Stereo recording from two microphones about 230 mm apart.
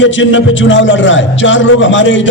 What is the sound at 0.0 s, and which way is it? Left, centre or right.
A man's voice, left.